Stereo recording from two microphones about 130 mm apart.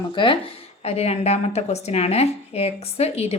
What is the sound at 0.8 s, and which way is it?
A woman's voice, 50° left (ahead or behind).